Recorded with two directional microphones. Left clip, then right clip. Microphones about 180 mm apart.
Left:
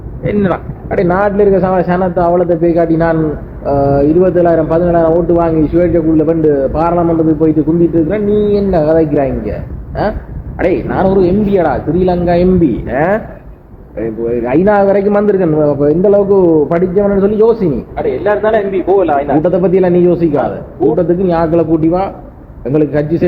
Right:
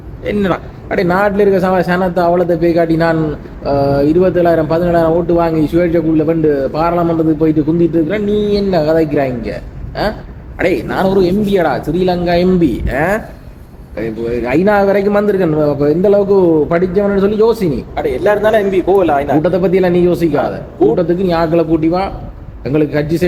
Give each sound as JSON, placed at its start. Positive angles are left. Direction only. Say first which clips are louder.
{"t": 0.3, "sound": "speech", "louder": "left 2 dB", "side_deg": 5}
{"t": 17.9, "sound": "a man's voice", "louder": "right 1 dB", "side_deg": -25}
{"t": 19.4, "sound": "speech", "louder": "left 2 dB", "side_deg": 5}